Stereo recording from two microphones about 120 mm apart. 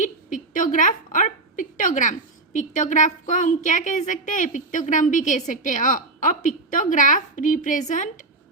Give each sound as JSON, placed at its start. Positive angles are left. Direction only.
{"t": 0.0, "sound": "a woman's voice", "side_deg": 90}